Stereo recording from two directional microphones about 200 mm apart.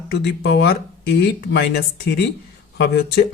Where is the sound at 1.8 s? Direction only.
55° left (ahead or behind).